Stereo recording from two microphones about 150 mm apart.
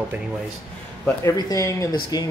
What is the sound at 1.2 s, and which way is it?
Speech, 25° left (ahead or behind).